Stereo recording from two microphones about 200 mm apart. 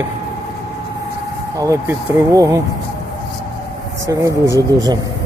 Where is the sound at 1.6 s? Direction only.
15° right (ahead or behind).